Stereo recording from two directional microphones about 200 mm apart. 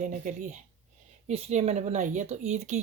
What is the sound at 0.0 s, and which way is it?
Speech, 40° right (ahead or behind).